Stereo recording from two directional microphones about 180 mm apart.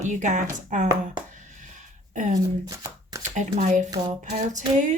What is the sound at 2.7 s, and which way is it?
Shuffling cards, 20° right (ahead or behind).